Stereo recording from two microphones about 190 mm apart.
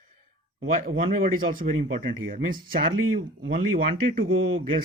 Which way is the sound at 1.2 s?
45° right (ahead or behind).